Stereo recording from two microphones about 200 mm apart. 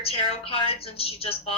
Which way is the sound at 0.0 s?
30° left (ahead or behind).